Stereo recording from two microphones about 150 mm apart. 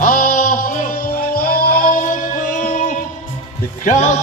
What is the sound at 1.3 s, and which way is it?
Music, 80° left.